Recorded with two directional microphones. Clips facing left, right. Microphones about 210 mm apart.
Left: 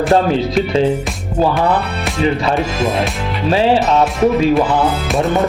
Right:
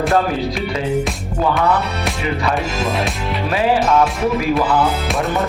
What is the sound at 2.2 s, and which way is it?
A man's voice, 30° left (ahead or behind).